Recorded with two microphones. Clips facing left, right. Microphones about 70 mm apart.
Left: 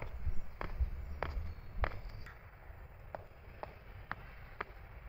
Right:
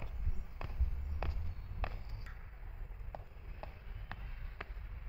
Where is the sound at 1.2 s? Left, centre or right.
Left.